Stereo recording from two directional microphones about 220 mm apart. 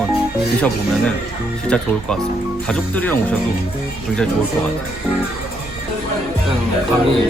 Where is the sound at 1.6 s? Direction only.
5° left (ahead or behind).